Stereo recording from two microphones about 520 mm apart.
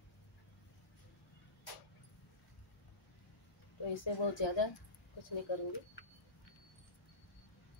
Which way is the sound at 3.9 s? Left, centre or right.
Left.